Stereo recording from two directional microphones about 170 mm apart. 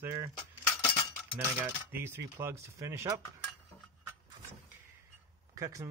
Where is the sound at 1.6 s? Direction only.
15° right (ahead or behind).